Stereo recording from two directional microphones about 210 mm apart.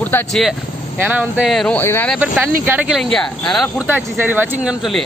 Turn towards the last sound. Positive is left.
turn(degrees=0)  # may be behind; listen again after turning